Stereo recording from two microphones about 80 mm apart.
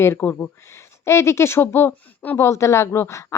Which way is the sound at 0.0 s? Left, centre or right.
Left.